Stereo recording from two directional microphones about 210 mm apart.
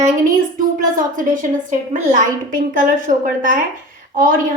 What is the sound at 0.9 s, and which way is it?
A woman's voice, 40° right (ahead or behind).